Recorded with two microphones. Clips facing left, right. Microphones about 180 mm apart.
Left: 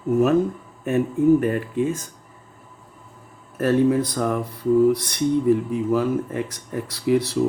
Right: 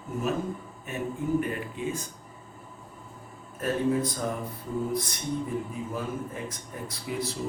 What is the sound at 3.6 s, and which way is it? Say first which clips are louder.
Speech: left 8 dB; 80° left.